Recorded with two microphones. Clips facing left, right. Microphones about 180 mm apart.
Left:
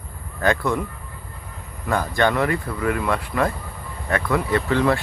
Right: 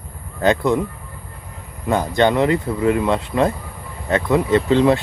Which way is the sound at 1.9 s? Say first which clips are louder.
Right 4 dB; 20° right (ahead or behind).